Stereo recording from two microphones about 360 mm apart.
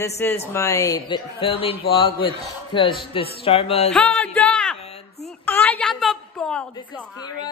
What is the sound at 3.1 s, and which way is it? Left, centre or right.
Speech, centre.